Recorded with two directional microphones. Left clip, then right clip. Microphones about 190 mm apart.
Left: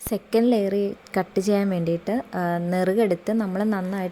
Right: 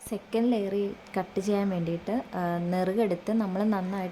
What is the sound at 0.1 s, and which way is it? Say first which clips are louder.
A woman's voice: left 7 dB; 30° left (ahead or behind).